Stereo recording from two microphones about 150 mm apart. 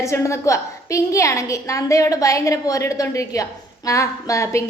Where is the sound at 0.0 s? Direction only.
20° left (ahead or behind).